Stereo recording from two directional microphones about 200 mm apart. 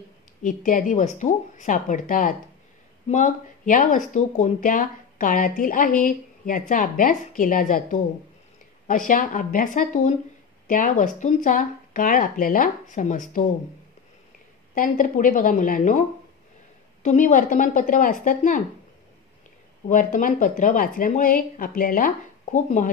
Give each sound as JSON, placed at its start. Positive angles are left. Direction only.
{"t": 0.4, "sound": "speech", "side_deg": 40}
{"t": 14.7, "sound": "speech", "side_deg": 40}
{"t": 19.9, "sound": "speech", "side_deg": 40}